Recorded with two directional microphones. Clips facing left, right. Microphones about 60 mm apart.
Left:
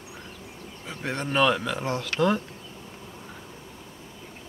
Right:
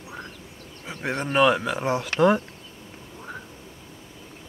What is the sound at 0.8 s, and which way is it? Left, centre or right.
Speech, centre.